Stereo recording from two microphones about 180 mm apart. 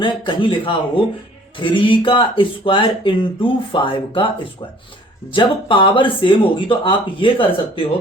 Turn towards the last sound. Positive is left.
turn(degrees=30)  # may be behind; listen again after turning